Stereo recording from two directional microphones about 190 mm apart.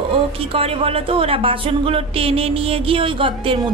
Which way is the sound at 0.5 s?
30° right (ahead or behind).